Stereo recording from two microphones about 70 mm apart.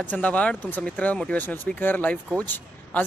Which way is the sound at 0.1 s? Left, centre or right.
Left.